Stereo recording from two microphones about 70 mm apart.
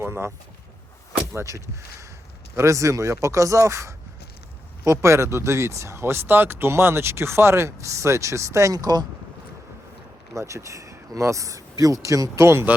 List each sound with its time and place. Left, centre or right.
0.0 s a sound: right
1.4 s speech: right
10.3 s speech: right